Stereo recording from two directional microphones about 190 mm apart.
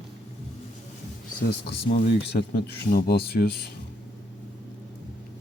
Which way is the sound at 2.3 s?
55° left (ahead or behind).